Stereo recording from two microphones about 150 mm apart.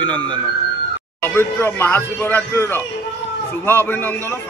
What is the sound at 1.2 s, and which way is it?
Speech, 15° left (ahead or behind).